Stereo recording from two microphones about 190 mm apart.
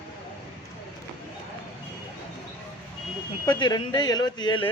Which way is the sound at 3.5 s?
25° left (ahead or behind).